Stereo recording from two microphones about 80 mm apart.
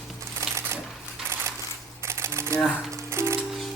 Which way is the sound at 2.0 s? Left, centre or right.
Right.